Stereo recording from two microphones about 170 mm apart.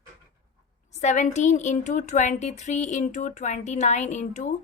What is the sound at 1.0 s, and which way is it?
A woman's voice, 45° left (ahead or behind).